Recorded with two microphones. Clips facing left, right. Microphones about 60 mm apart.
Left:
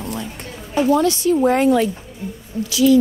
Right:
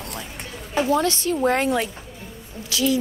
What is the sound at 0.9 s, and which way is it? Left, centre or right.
Speech, right.